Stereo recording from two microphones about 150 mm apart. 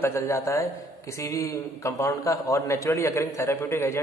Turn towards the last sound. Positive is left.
turn(degrees=20)  # may be behind; listen again after turning